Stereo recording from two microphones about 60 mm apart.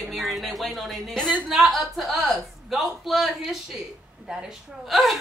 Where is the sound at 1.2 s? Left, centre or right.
Centre.